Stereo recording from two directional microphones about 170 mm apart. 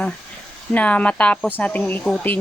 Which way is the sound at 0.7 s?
10° left (ahead or behind).